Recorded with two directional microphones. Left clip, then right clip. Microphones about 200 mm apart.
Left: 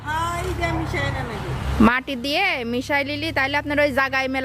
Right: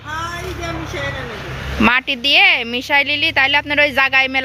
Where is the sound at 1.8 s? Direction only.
20° left (ahead or behind).